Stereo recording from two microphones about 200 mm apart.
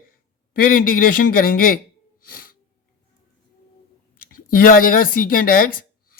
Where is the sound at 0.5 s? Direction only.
45° left (ahead or behind).